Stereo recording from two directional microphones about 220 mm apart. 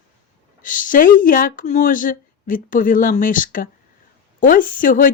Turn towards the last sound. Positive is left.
turn(degrees=40)  # may be behind; listen again after turning